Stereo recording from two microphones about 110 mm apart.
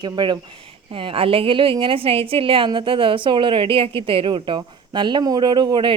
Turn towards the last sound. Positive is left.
turn(degrees=-45)  # may be behind; listen again after turning